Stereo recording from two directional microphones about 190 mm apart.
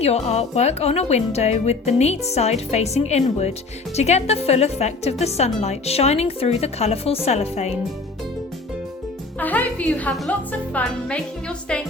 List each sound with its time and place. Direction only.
0.0 s speech: 35° left (ahead or behind)
9.4 s a woman's voice: 10° left (ahead or behind)